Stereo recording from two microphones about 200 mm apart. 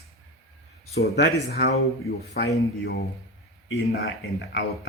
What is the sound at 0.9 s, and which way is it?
Speech, 55° left (ahead or behind).